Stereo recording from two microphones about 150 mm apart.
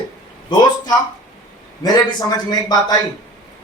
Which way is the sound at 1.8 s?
25° left (ahead or behind).